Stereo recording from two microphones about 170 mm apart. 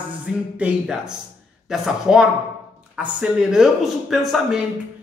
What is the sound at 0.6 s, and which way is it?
Speech, 5° right (ahead or behind).